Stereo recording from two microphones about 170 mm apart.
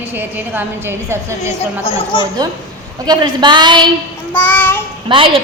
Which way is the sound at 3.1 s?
25° right (ahead or behind).